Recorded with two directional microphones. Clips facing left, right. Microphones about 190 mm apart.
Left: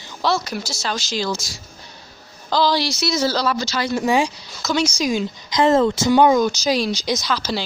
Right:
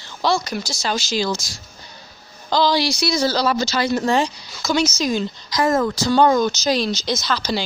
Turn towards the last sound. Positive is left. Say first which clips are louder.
# right 1 dB
turn(degrees=5)  # may be behind; listen again after turning